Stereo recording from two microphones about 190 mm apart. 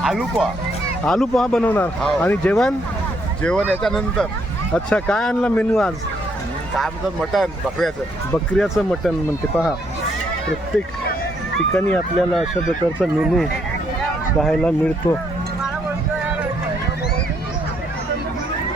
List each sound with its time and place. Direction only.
0.0 s speech: centre (ahead or behind)
11.7 s speech: 5° left (ahead or behind)